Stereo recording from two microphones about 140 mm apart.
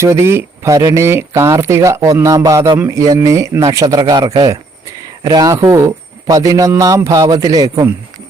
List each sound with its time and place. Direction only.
0.0 s speech: 20° right (ahead or behind)